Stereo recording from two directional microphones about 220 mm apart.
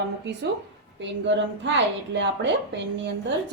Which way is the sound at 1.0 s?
55° right (ahead or behind).